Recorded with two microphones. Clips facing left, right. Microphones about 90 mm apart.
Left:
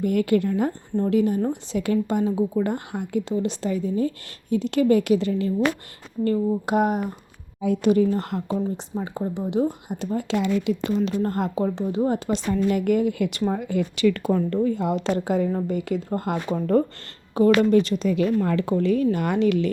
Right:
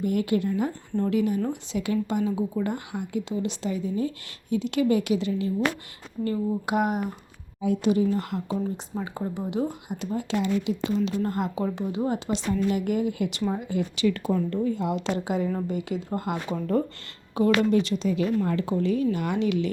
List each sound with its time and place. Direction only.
0.0 s speech: 55° left (ahead or behind)
1.1 s speech: 40° left (ahead or behind)
6.2 s speech: 35° left (ahead or behind)
7.6 s speech: 60° left (ahead or behind)
9.0 s speech: 20° left (ahead or behind)
10.2 s speech: 70° left (ahead or behind); by 18.1 s 45° left (ahead or behind)
18.4 s a woman's voice: 65° left (ahead or behind)
19.1 s speech: 50° left (ahead or behind)